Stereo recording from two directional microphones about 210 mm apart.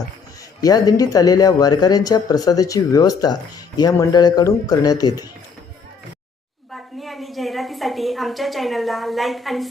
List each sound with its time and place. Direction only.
0.6 s speech: 15° left (ahead or behind)
6.7 s a woman's voice: centre (ahead or behind)